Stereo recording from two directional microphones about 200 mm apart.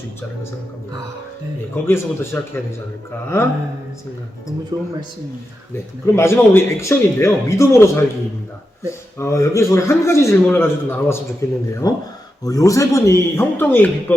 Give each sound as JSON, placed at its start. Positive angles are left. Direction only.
{"t": 1.7, "sound": "speech", "side_deg": 10}
{"t": 4.7, "sound": "speech", "side_deg": -20}
{"t": 5.7, "sound": "speech", "side_deg": 10}
{"t": 9.1, "sound": "speech", "side_deg": 15}